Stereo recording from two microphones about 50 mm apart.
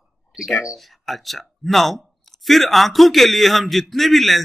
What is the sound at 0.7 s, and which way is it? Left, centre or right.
Speech, centre.